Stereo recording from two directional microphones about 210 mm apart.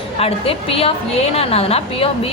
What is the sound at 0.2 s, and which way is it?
A woman's voice, 30° left (ahead or behind).